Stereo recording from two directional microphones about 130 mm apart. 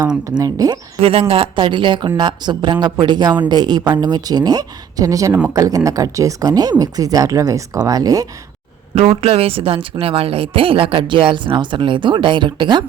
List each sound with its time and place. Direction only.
0.3 s speech: 25° right (ahead or behind)
1.0 s speech: 45° right (ahead or behind); by 8.3 s 30° right (ahead or behind)
9.0 s speech: 50° right (ahead or behind)